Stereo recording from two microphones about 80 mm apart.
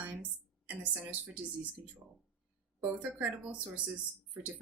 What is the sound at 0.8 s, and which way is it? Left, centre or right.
Speech, right.